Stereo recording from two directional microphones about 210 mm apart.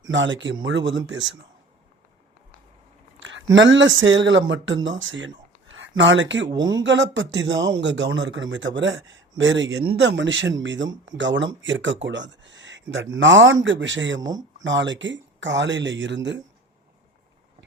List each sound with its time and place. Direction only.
0.1 s speech: 60° right (ahead or behind)
3.2 s speech: 60° right (ahead or behind)